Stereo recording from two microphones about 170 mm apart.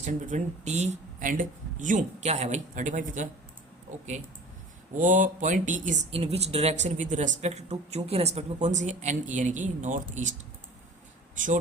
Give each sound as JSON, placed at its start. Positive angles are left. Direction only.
{"t": 0.0, "sound": "speech", "side_deg": -45}